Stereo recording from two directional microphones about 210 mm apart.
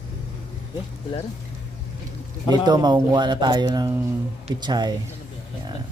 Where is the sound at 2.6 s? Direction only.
20° right (ahead or behind).